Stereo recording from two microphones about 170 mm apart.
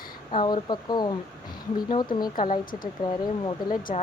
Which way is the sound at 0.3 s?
30° left (ahead or behind).